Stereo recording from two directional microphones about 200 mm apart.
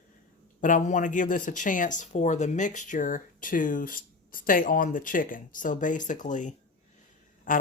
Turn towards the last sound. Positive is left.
turn(degrees=45)  # may be behind; listen again after turning